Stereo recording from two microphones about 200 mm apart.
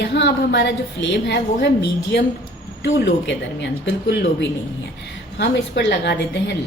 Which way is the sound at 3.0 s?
60° left (ahead or behind).